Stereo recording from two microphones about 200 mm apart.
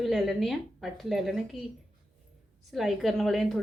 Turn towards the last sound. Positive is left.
turn(degrees=0)  # may be behind; listen again after turning